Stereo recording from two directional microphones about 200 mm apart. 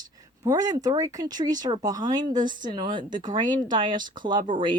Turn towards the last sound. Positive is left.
turn(degrees=-25)  # may be behind; listen again after turning